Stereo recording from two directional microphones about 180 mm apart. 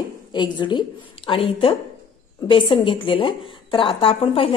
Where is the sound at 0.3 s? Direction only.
25° left (ahead or behind).